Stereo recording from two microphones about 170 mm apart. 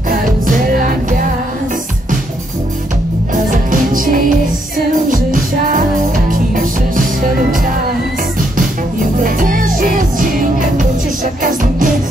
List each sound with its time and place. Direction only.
0.1 s music: 55° right (ahead or behind)
3.3 s music: 50° right (ahead or behind)